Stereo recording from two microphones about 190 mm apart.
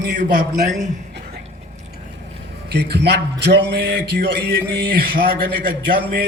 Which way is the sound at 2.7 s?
60° right (ahead or behind).